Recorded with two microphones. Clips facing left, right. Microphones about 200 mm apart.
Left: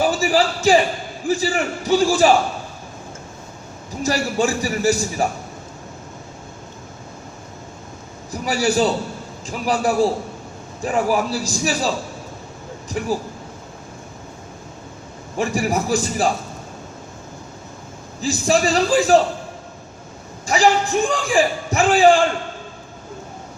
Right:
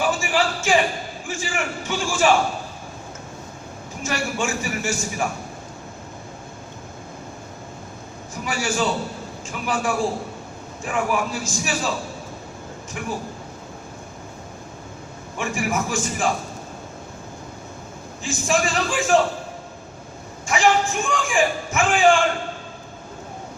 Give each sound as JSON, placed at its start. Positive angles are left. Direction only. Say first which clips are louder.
{"t": 0.0, "sound": "a man's voice", "louder": "left 4 dB", "side_deg": 35}
{"t": 4.0, "sound": "a man's voice", "louder": "left 6 dB", "side_deg": 35}
{"t": 8.3, "sound": "a man's voice", "louder": "left 6 dB", "side_deg": 35}
{"t": 13.0, "sound": "a man's voice", "louder": "left 6 dB", "side_deg": 35}
{"t": 15.4, "sound": "a man's voice", "louder": "left 4 dB", "side_deg": 35}
{"t": 18.2, "sound": "a man's voice", "louder": "left 4 dB", "side_deg": 35}
{"t": 20.5, "sound": "a man's voice", "louder": "left 3 dB", "side_deg": 35}